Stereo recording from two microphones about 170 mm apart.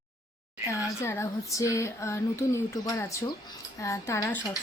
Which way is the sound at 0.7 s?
15° left (ahead or behind).